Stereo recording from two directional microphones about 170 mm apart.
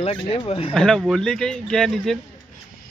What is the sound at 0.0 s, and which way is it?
Speech, 35° left (ahead or behind).